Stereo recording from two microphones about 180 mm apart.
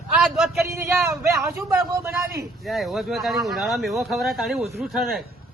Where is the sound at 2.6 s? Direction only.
Centre (ahead or behind).